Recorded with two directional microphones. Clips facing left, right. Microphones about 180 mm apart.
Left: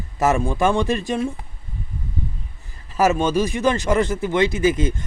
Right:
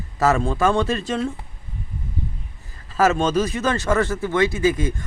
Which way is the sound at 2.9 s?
15° left (ahead or behind).